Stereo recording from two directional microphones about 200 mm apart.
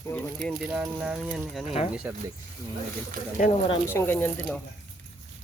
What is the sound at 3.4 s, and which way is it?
Speech, 45° left (ahead or behind).